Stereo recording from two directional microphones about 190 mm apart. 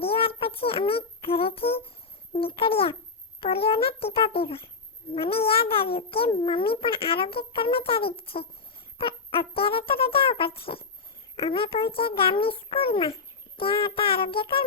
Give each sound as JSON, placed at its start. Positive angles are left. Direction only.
{"t": 0.0, "sound": "child singing", "side_deg": 30}
{"t": 2.3, "sound": "a sound", "side_deg": 30}
{"t": 3.4, "sound": "a child's voice", "side_deg": 30}